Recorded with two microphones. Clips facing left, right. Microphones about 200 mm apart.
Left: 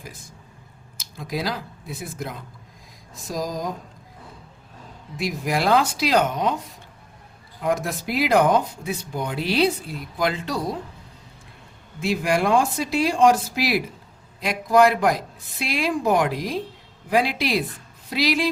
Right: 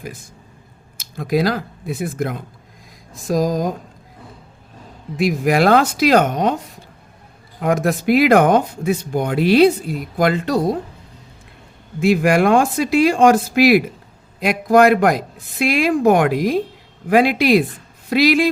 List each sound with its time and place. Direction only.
1.1 s a woman's voice: 60° right (ahead or behind)
5.1 s speech: 70° right (ahead or behind)
5.8 s speech: 50° right (ahead or behind)
7.6 s speech: 65° right (ahead or behind); by 10.8 s 50° right (ahead or behind)
11.9 s a woman's voice: 75° right (ahead or behind)